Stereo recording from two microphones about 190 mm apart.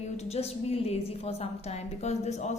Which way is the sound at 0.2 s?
35° left (ahead or behind).